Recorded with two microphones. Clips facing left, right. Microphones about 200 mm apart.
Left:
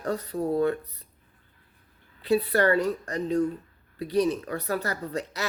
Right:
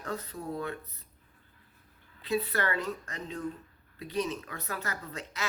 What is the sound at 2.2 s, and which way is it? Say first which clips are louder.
Speech: left 8 dB; 35° left (ahead or behind).